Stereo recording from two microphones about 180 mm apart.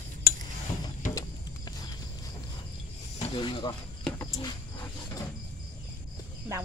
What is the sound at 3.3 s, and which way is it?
Speech, 25° left (ahead or behind).